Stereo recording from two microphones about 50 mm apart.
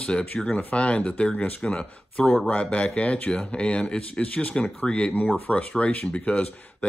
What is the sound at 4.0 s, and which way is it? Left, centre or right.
Speech, left.